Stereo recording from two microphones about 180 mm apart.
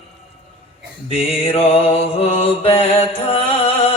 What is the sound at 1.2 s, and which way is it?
Mantra, 30° left (ahead or behind).